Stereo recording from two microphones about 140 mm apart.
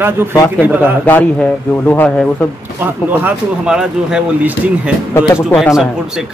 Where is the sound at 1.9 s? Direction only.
10° left (ahead or behind).